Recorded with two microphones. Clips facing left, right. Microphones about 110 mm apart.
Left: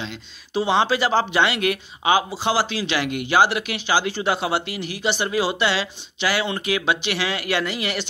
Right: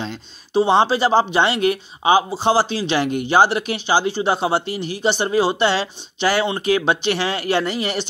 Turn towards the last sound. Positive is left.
turn(degrees=-35)  # may be behind; listen again after turning